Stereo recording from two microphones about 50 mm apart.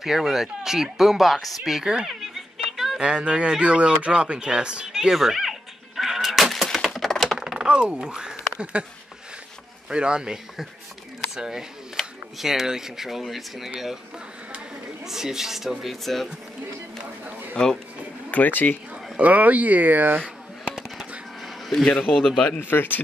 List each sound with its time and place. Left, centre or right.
0.0 s speech: centre
2.1 s music: centre
3.0 s speech: right
4.9 s music: centre
7.0 s typing: centre
7.5 s speech: centre
9.8 s speech: centre
15.0 s speech: centre
18.3 s speech: left
19.1 s speech: right
21.6 s speech: centre
22.6 s speech: left